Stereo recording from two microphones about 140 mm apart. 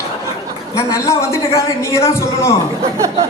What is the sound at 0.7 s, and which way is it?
A man's voice, 20° left (ahead or behind).